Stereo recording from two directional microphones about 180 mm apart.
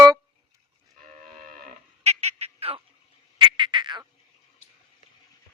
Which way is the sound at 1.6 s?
40° right (ahead or behind).